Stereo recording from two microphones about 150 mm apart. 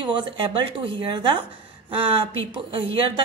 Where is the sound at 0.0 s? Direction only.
35° right (ahead or behind).